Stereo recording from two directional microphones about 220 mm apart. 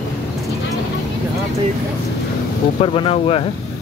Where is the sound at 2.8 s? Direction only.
25° left (ahead or behind).